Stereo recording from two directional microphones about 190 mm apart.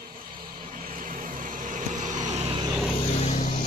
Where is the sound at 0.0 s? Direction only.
50° right (ahead or behind).